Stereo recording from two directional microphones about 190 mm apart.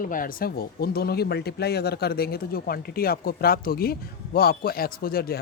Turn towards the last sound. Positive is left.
turn(degrees=50)  # may be behind; listen again after turning